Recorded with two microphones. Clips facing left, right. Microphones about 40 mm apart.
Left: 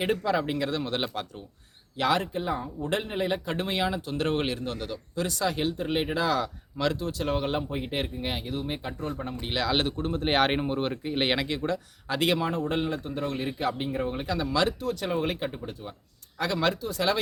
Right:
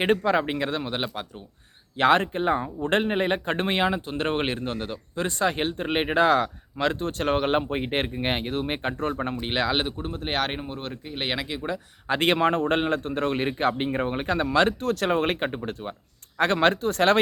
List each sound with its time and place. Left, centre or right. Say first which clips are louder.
0.0 s speech: right 4 dB; right
0.8 s speech: even; centre
2.0 s speech: right 6 dB; right
9.5 s speech: right 2 dB; right
9.7 s speech: even; centre
10.1 s speech: left 3 dB; centre
12.0 s speech: right 5 dB; right